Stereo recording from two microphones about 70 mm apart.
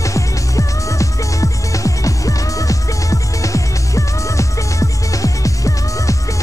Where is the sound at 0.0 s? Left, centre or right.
Left.